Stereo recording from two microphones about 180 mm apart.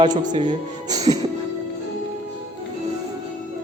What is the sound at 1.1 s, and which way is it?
Music, 25° right (ahead or behind).